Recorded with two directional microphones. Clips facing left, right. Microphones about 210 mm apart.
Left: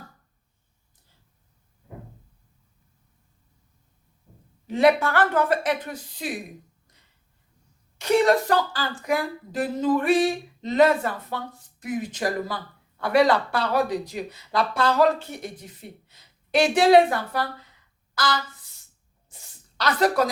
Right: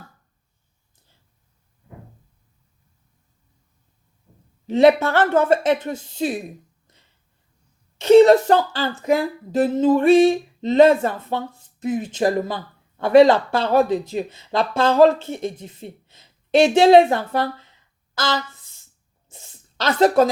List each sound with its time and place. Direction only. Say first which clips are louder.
4.6 s speech: right 5 dB; 25° right (ahead or behind)
7.9 s speech: right 9 dB; 25° right (ahead or behind)
18.1 s a sound: right 3 dB; 25° right (ahead or behind)